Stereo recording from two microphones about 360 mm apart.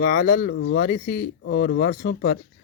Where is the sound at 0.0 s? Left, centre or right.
Left.